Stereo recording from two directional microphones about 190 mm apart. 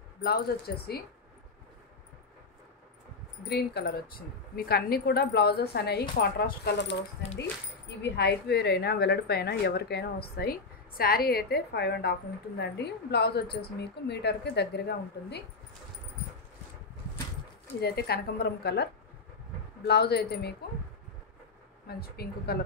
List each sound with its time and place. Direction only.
0.2 s a woman's voice: 55° left (ahead or behind)
3.4 s a woman's voice: 60° left (ahead or behind)
8.0 s a woman's voice: 60° left (ahead or behind)
17.7 s a woman's voice: 55° left (ahead or behind)
19.9 s a woman's voice: 60° left (ahead or behind)
21.8 s a woman's voice: 55° left (ahead or behind)